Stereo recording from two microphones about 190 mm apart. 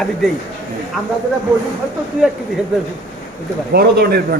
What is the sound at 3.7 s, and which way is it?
Speech, 55° right (ahead or behind).